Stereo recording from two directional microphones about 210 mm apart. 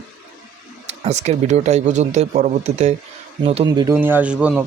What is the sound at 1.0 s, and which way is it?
A man's voice, 30° right (ahead or behind).